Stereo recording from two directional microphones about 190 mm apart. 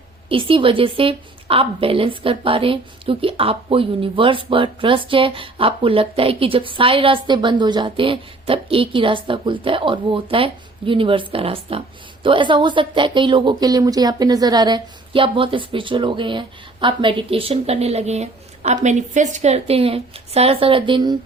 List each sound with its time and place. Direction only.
0.3 s a woman's voice: 30° right (ahead or behind)